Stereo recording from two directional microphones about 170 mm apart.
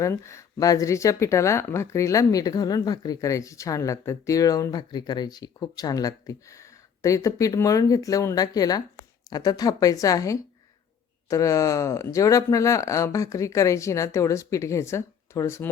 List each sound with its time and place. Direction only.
0.0 s speech: 15° left (ahead or behind)